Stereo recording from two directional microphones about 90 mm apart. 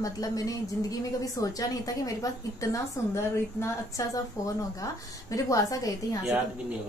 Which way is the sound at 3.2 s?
30° left (ahead or behind).